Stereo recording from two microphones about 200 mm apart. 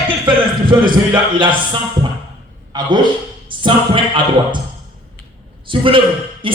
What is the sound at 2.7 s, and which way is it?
Speech, 20° right (ahead or behind).